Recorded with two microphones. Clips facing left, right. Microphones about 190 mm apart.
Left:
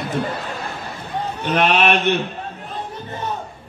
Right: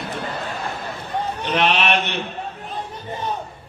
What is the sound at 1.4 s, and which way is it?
Speech, 50° left (ahead or behind).